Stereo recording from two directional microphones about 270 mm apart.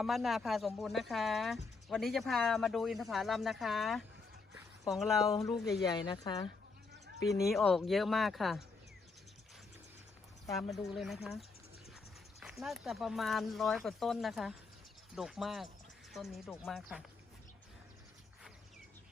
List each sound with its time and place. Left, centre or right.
0.0 s speech: centre
5.8 s a woman's voice: centre
7.5 s speech: centre
10.5 s speech: centre